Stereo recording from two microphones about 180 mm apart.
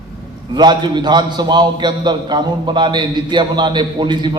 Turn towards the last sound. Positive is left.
turn(degrees=-25)  # may be behind; listen again after turning